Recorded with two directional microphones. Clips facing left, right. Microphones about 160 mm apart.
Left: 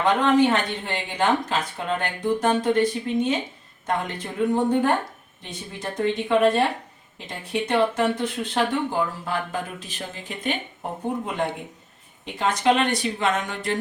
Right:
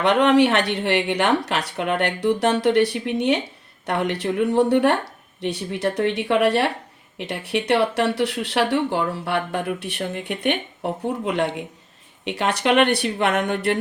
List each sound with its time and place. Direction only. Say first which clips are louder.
0.0 s speech: right 3 dB; 70° right (ahead or behind)